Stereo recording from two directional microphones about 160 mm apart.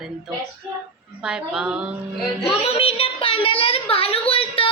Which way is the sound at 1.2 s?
5° right (ahead or behind).